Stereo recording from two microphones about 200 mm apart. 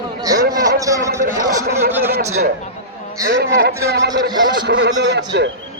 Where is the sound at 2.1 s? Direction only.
50° right (ahead or behind).